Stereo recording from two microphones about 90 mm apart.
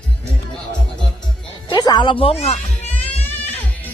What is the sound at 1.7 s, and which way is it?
Music, 50° left (ahead or behind).